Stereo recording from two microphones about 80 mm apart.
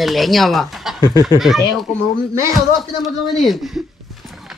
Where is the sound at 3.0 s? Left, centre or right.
Centre.